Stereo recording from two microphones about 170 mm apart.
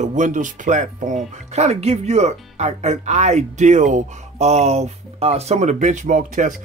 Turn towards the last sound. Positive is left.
turn(degrees=-45)  # may be behind; listen again after turning